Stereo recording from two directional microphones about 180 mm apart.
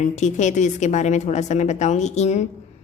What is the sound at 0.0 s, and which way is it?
Speech, 40° left (ahead or behind).